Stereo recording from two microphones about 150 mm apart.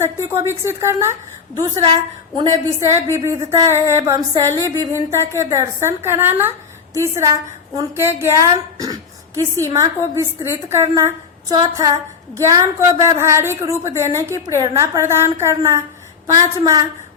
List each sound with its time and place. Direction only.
0.0 s a woman's voice: 20° right (ahead or behind)
1.8 s a woman's voice: 35° right (ahead or behind)
2.8 s a woman's voice: 20° right (ahead or behind)